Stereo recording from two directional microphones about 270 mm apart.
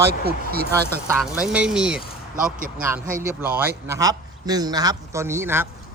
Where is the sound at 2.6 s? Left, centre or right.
Right.